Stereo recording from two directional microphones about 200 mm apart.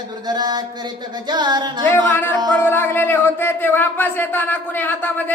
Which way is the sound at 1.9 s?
10° left (ahead or behind).